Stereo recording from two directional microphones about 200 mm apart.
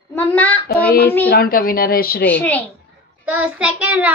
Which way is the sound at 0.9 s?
50° left (ahead or behind).